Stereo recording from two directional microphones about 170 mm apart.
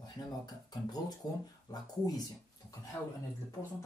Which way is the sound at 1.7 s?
25° left (ahead or behind).